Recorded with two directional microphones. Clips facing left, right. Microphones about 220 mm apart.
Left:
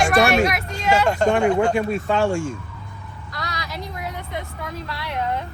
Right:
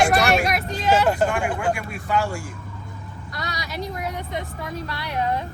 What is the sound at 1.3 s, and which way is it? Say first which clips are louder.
Speech: left 6 dB; 25° left (ahead or behind).